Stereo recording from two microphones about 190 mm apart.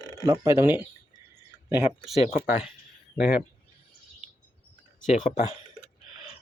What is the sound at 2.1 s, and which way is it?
Speech, 35° left (ahead or behind).